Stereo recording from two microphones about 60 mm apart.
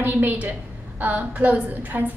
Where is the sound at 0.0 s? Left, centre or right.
Right.